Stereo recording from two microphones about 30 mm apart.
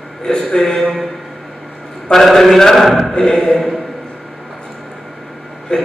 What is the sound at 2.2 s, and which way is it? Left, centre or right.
Speech, centre.